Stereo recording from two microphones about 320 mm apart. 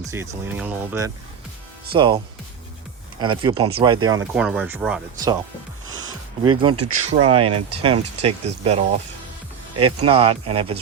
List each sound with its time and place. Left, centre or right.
0.1 s speech: centre
4.4 s speech: centre
5.8 s music: right
6.4 s speech: centre